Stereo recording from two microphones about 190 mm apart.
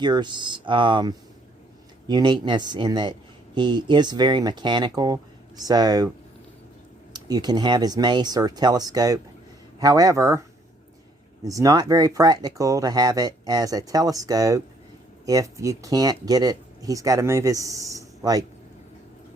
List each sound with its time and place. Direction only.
0.0 s speech: 25° right (ahead or behind)
7.1 s speech: 20° right (ahead or behind)
11.4 s speech: 20° right (ahead or behind)